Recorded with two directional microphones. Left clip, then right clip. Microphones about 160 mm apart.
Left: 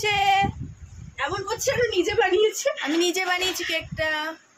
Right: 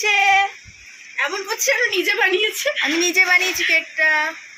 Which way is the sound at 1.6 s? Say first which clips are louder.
Right 5 dB; 90° left.